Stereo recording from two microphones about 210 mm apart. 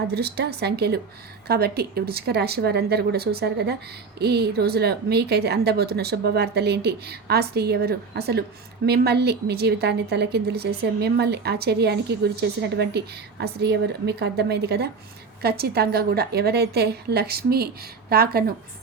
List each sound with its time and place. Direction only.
0.1 s a woman's voice: 50° right (ahead or behind)